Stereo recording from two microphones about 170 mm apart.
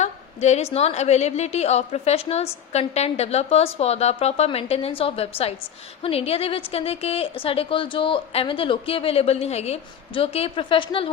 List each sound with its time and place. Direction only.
0.0 s a woman's voice: 40° left (ahead or behind)